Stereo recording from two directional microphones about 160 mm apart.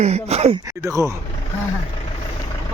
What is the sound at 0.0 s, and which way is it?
Speech, 40° right (ahead or behind).